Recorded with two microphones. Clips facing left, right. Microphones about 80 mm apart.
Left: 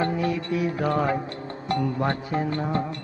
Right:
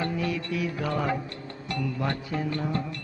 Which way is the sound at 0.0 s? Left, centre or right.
Left.